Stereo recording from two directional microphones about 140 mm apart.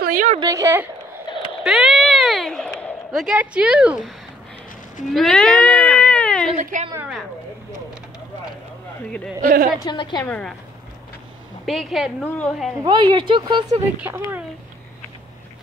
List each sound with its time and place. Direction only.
0.0 s a sound: 75° right (ahead or behind)
0.4 s speech: 25° right (ahead or behind)
1.6 s a sound: centre (ahead or behind)
5.1 s cat: 5° left (ahead or behind)
6.6 s a woman's voice: 65° right (ahead or behind)
9.4 s a woman's voice: 80° right
9.8 s a woman's voice: 30° left (ahead or behind)
10.2 s speech: 10° left (ahead or behind)
11.6 s a woman's voice: centre (ahead or behind)
12.8 s speech: 30° right (ahead or behind)
13.7 s speech: 20° right (ahead or behind)